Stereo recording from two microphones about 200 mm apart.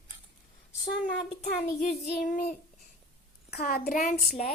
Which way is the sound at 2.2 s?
45° left (ahead or behind).